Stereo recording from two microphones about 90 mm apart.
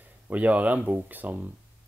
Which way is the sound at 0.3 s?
15° right (ahead or behind).